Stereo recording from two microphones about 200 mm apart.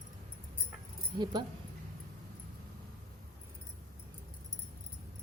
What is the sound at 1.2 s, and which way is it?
Speech, 20° right (ahead or behind).